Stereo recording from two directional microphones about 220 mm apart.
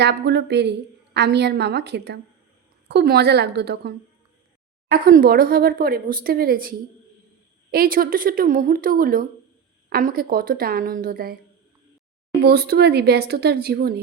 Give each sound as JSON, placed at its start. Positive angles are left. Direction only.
{"t": 0.0, "sound": "a woman's voice", "side_deg": -50}
{"t": 12.5, "sound": "a woman's voice", "side_deg": -45}